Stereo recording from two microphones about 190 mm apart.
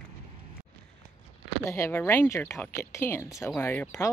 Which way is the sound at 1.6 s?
15° left (ahead or behind).